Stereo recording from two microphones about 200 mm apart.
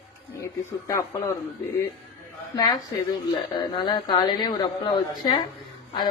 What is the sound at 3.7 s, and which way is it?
A woman's voice, 25° left (ahead or behind).